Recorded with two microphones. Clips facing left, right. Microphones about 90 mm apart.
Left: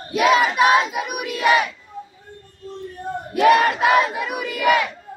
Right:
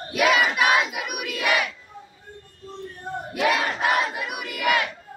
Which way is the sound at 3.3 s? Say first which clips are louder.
Left 9 dB; 50° left (ahead or behind).